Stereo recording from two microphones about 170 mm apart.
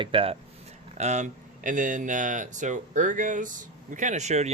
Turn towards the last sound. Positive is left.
turn(degrees=-40)  # may be behind; listen again after turning